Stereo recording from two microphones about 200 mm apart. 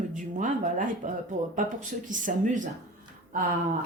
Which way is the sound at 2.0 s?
40° right (ahead or behind).